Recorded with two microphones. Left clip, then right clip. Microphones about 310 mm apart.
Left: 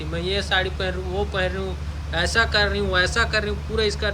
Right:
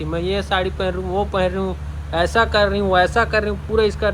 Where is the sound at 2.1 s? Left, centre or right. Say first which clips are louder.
Right 4 dB; centre.